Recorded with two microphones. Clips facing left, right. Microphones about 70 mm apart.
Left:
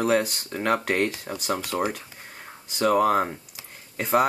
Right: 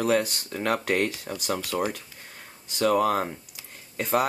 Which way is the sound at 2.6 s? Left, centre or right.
Centre.